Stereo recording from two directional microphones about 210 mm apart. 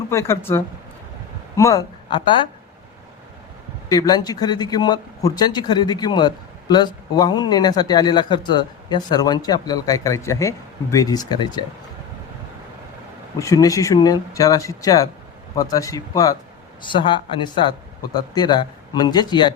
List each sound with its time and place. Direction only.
0.1 s a woman's voice: 15° left (ahead or behind)
3.8 s speech: 20° left (ahead or behind)
13.4 s speech: 15° left (ahead or behind)